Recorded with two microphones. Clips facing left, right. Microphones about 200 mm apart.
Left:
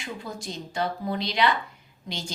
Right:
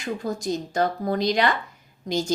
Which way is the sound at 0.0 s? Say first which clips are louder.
Right 8 dB; 45° right (ahead or behind).